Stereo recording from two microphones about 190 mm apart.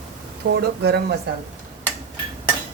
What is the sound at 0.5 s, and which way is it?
Speech, 60° right (ahead or behind).